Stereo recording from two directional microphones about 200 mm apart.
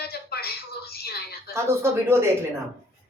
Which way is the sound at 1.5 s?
15° right (ahead or behind).